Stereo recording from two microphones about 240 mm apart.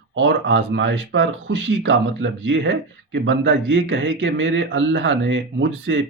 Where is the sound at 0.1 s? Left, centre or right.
Right.